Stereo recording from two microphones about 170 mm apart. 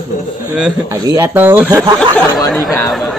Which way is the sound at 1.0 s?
20° right (ahead or behind).